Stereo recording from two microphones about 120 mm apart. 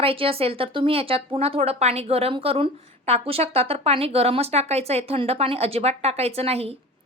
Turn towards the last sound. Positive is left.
turn(degrees=-55)  # may be behind; listen again after turning